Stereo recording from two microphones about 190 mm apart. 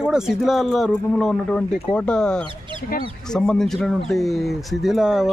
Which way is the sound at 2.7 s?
50° left (ahead or behind).